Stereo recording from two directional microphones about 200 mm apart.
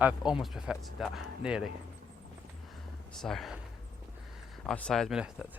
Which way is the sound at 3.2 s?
Centre (ahead or behind).